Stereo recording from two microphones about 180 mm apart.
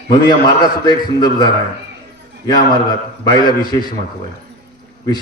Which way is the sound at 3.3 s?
25° left (ahead or behind).